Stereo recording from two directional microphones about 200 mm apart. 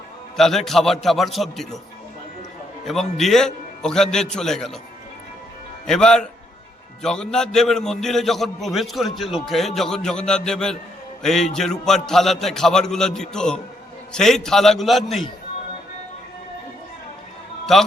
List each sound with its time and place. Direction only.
0.3 s a man's voice: centre (ahead or behind)
2.8 s a man's voice: centre (ahead or behind)
5.8 s a man's voice: 5° left (ahead or behind)
17.7 s a man's voice: centre (ahead or behind)